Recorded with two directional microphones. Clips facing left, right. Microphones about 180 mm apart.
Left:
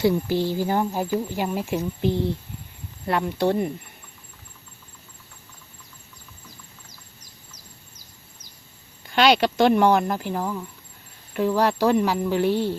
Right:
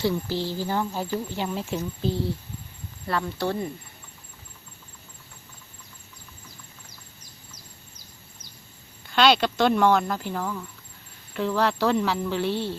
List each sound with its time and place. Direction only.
0.0 s speech: 20° left (ahead or behind)
9.1 s speech: 10° left (ahead or behind)